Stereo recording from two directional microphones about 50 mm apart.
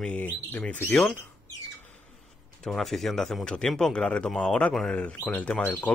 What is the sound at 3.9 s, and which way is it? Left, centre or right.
Speech, centre.